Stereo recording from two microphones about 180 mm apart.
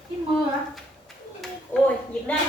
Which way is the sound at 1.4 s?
5° left (ahead or behind).